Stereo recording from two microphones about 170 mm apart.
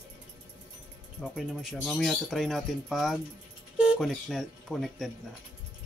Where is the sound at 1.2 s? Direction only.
Centre (ahead or behind).